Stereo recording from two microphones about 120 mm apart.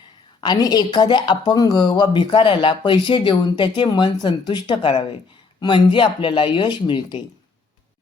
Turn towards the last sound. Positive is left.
turn(degrees=40)  # may be behind; listen again after turning